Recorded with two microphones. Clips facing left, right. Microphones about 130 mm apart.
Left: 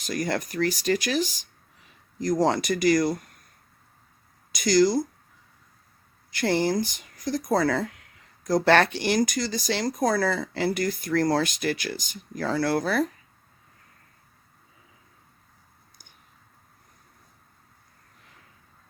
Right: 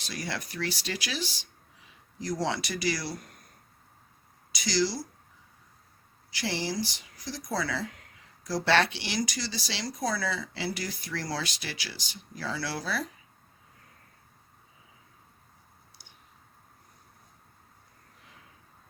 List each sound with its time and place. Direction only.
0.0 s speech: 45° left (ahead or behind)
4.5 s speech: 50° left (ahead or behind)
6.3 s speech: 50° left (ahead or behind)